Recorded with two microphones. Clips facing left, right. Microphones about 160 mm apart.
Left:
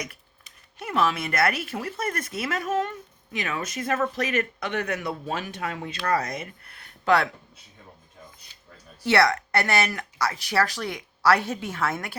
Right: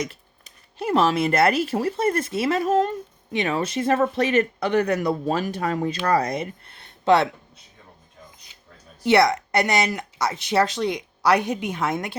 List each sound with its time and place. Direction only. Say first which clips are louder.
0.0 s speech: right 7 dB; 30° right (ahead or behind)
9.0 s speech: right 4 dB; 20° right (ahead or behind)